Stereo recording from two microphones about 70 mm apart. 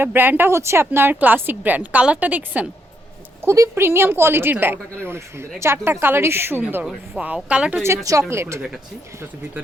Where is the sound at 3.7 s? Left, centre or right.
Right.